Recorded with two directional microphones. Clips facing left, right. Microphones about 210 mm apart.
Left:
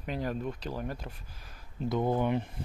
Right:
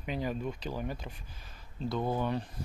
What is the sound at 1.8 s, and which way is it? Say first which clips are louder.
Speech: left 3 dB; 15° left (ahead or behind).